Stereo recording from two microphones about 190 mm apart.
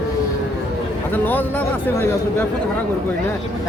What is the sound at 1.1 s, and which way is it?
Speech, 10° left (ahead or behind).